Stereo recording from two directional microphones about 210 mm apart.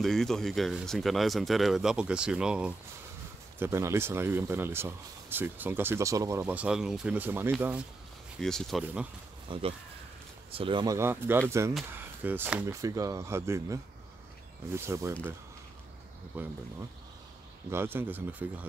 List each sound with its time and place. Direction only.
0.0 s speech: centre (ahead or behind)
9.5 s speech: 25° right (ahead or behind)
14.9 s speech: 15° right (ahead or behind)
16.3 s speech: 10° right (ahead or behind)
17.6 s speech: 10° right (ahead or behind)